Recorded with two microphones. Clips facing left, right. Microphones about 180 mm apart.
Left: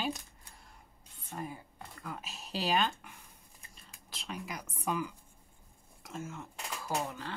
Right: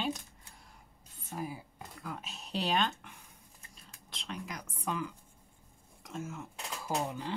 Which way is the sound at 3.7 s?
5° left (ahead or behind).